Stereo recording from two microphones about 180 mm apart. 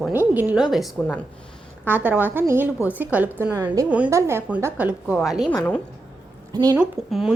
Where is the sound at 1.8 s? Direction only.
10° right (ahead or behind).